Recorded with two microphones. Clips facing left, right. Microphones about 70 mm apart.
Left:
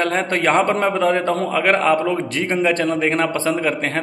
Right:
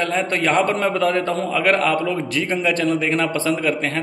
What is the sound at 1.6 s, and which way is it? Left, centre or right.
A man's voice, left.